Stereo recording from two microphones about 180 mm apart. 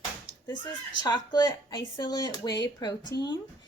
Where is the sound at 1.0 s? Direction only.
25° left (ahead or behind).